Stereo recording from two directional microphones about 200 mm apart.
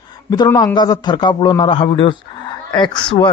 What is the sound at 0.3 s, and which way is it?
A man's voice, 20° left (ahead or behind).